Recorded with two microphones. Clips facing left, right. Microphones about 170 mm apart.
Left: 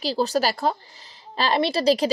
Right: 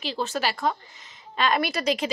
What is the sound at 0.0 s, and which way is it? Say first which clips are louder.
A woman's voice: left 6 dB; 35° left (ahead or behind).